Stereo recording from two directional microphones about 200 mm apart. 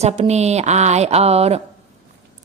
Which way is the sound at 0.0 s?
35° right (ahead or behind).